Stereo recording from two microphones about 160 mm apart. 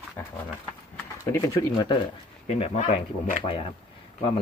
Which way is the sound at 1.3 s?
20° left (ahead or behind).